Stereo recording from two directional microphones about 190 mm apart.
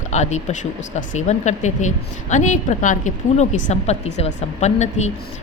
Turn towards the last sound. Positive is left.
turn(degrees=35)  # may be behind; listen again after turning